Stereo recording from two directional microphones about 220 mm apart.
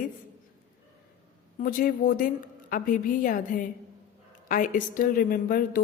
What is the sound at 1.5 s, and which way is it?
A woman's voice, 40° left (ahead or behind).